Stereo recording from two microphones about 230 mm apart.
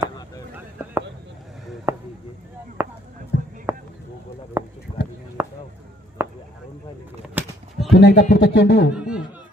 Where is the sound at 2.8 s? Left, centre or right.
Centre.